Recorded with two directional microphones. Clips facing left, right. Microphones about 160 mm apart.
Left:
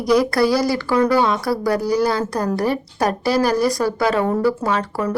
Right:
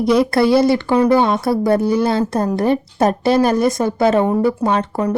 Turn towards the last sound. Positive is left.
turn(degrees=-25)  # may be behind; listen again after turning